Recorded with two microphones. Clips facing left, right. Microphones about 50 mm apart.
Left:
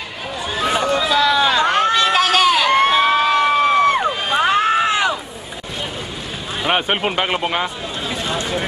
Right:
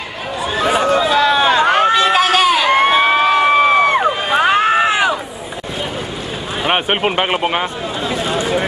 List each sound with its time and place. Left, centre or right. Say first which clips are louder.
0.6 s chatter: right 4 dB; centre
0.9 s run: right 3 dB; right
6.6 s speech: right 2 dB; centre
8.1 s a sound: right 5 dB; centre